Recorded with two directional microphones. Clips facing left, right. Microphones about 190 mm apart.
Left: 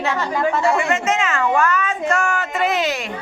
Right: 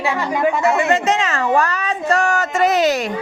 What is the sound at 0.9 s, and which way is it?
A woman's voice, 35° right (ahead or behind).